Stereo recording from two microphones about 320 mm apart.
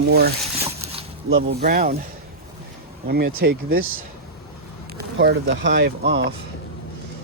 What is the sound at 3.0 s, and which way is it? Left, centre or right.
Speech, right.